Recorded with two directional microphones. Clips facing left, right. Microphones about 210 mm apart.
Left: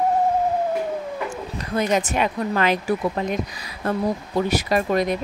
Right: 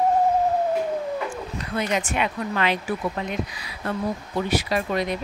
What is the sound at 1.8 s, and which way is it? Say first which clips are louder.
Speech: left 4 dB; 40° left (ahead or behind).